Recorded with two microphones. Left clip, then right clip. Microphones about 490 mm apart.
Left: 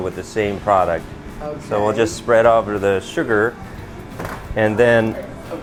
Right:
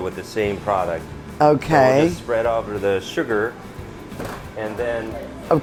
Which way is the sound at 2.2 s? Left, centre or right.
Left.